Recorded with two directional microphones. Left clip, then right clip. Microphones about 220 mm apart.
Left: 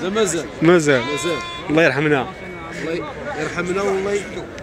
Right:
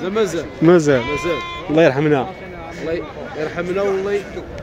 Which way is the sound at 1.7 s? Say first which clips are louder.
Right 2 dB; 10° right (ahead or behind).